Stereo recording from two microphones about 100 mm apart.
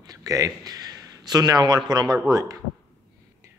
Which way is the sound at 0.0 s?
35° right (ahead or behind).